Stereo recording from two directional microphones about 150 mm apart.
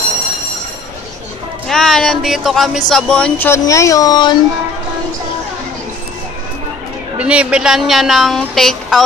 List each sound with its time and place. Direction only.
1.7 s a woman's voice: 5° left (ahead or behind); by 4.4 s 25° left (ahead or behind)
7.2 s a woman's voice: 10° right (ahead or behind)